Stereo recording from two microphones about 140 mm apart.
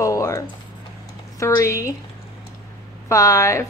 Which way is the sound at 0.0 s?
20° left (ahead or behind).